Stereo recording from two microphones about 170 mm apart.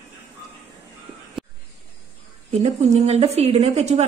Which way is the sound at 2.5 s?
40° right (ahead or behind).